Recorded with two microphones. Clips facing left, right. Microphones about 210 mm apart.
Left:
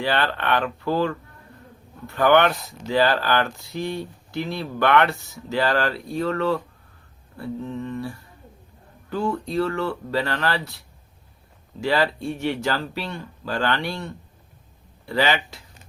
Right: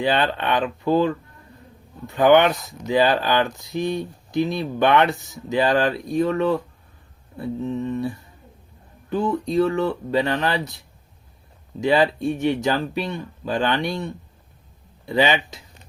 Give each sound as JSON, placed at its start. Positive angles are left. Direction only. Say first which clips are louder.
{"t": 0.0, "sound": "speech", "louder": "right 3 dB", "side_deg": -20}
{"t": 11.8, "sound": "speech", "louder": "right 4 dB", "side_deg": -20}